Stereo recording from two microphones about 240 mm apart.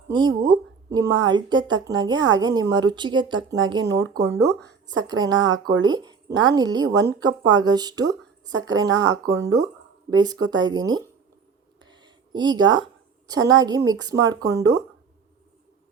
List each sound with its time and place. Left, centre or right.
0.1 s a woman's voice: centre
5.0 s a woman's voice: centre
11.8 s a sound: centre
12.7 s a woman's voice: centre